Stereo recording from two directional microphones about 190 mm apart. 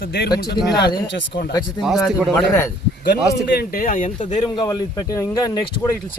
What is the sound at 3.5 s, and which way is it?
Speech, 45° left (ahead or behind).